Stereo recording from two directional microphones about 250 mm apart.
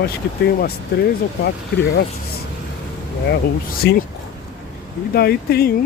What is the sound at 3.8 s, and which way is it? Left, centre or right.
Speech, left.